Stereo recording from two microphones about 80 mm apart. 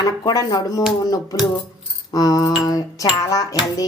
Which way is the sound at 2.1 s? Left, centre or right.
Left.